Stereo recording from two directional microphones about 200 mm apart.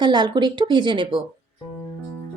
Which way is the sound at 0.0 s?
20° right (ahead or behind).